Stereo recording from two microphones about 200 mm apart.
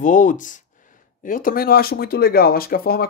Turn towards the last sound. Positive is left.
turn(degrees=50)  # may be behind; listen again after turning